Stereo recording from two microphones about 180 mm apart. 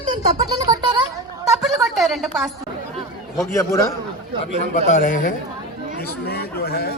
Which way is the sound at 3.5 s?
15° left (ahead or behind).